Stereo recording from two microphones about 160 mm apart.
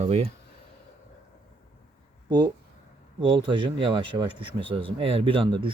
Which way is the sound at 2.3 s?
25° right (ahead or behind).